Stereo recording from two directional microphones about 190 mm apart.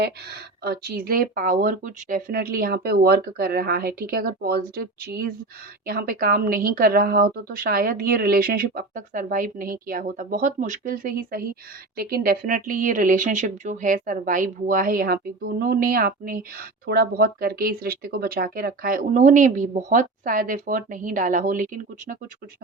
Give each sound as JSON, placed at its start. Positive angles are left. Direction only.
{"t": 0.0, "sound": "speech", "side_deg": -60}